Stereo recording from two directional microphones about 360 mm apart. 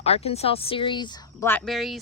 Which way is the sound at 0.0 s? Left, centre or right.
Centre.